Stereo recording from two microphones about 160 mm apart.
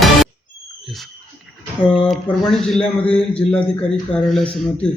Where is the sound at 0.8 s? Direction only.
Centre (ahead or behind).